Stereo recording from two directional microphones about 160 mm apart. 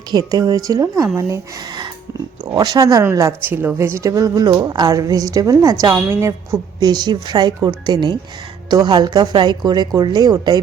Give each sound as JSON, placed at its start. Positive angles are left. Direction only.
{"t": 0.1, "sound": "speech", "side_deg": -25}